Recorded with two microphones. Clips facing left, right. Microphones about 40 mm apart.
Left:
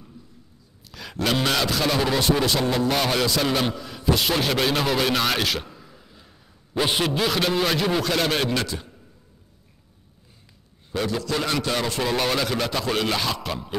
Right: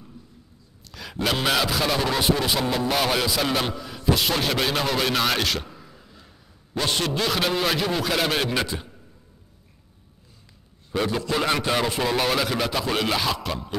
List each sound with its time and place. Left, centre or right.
0.8 s a sound: centre
1.2 s a man's voice: centre
11.0 s a man's voice: centre
11.8 s speech: centre